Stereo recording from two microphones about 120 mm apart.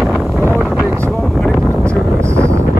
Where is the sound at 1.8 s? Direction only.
25° right (ahead or behind).